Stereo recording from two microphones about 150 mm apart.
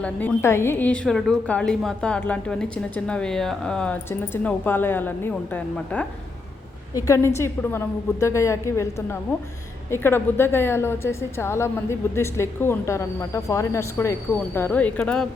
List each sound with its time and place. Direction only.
0.0 s a woman's voice: 10° left (ahead or behind)
6.9 s a woman's voice: 20° left (ahead or behind)